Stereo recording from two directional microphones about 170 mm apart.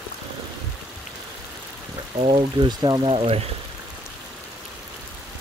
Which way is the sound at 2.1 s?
35° right (ahead or behind).